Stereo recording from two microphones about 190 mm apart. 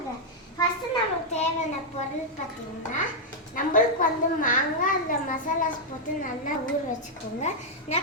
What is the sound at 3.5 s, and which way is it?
A child's voice, 45° left (ahead or behind).